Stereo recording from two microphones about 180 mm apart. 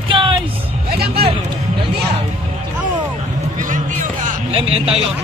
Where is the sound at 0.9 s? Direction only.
60° right (ahead or behind).